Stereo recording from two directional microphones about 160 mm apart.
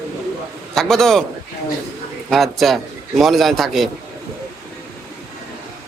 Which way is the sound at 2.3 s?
Centre (ahead or behind).